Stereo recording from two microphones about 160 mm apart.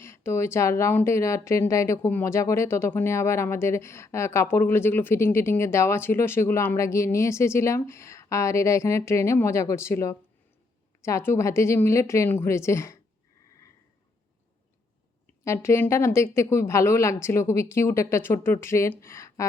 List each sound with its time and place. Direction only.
0.0 s a woman's voice: 15° left (ahead or behind)
15.4 s a woman's voice: 15° left (ahead or behind)